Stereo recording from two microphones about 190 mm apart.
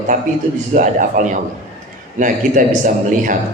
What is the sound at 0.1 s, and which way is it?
A man's voice, 45° right (ahead or behind).